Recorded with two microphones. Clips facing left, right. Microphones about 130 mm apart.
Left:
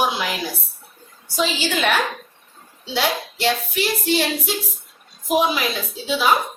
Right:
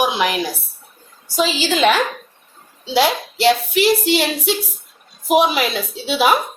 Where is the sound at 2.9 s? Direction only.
90° right.